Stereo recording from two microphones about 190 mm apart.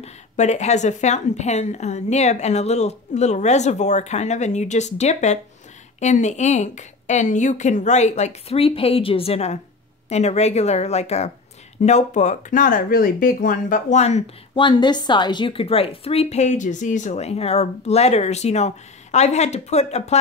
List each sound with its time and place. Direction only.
0.0 s speech: 35° left (ahead or behind)